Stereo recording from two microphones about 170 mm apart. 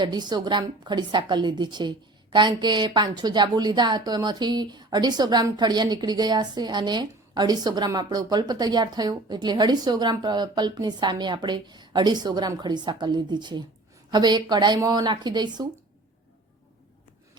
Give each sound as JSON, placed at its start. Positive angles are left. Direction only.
{"t": 0.0, "sound": "a woman's voice", "side_deg": -25}